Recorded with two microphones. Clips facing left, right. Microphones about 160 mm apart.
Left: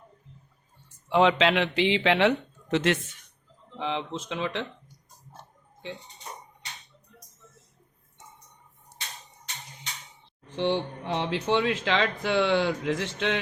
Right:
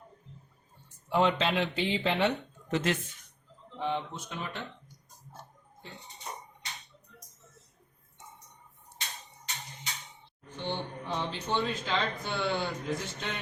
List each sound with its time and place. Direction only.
1.1 s speech: 90° left
10.5 s speech: 75° left (ahead or behind)